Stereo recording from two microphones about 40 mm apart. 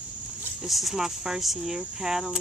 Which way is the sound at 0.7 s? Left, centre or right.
Centre.